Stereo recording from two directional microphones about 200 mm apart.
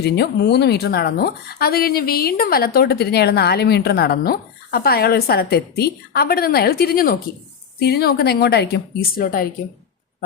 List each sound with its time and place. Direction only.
0.0 s speech: 55° left (ahead or behind)